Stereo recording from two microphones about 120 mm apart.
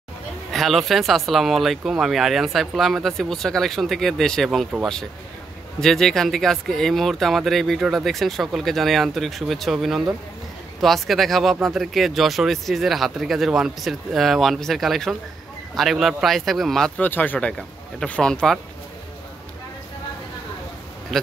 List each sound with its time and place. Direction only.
0.5 s speech: centre (ahead or behind)
5.8 s speech: 5° left (ahead or behind)
17.0 s speech: 15° left (ahead or behind)